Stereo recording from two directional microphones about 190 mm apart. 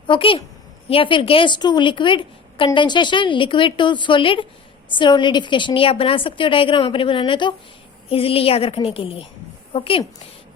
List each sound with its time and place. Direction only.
0.1 s a woman's voice: 30° left (ahead or behind)